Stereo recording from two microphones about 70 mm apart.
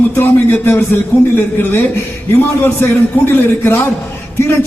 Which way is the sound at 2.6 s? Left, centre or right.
Left.